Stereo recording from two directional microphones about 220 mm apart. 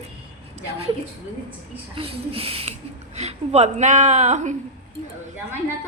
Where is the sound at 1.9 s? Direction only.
25° right (ahead or behind).